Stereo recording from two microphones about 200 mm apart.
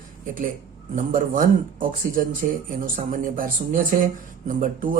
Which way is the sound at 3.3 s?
40° right (ahead or behind).